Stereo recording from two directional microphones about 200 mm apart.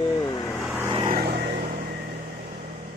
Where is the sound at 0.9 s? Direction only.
25° right (ahead or behind).